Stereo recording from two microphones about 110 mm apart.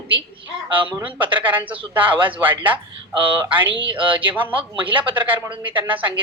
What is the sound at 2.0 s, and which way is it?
Speech, 50° right (ahead or behind).